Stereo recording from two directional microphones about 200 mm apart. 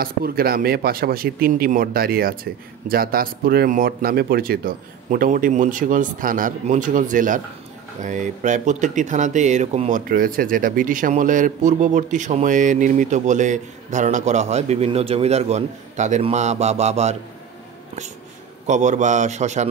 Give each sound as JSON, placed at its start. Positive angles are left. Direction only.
{"t": 0.0, "sound": "speech", "side_deg": -50}
{"t": 18.7, "sound": "speech", "side_deg": -35}